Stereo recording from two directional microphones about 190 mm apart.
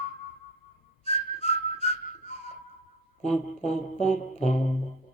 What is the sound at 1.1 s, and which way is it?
Whistling, 35° left (ahead or behind).